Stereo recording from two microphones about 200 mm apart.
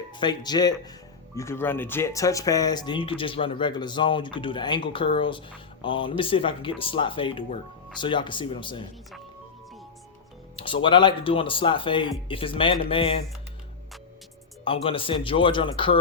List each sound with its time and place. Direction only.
0.1 s speech: 20° left (ahead or behind)
10.6 s speech: 25° left (ahead or behind)
14.6 s speech: 25° left (ahead or behind)